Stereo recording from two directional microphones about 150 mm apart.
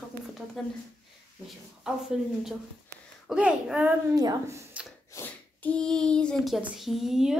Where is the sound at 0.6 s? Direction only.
Centre (ahead or behind).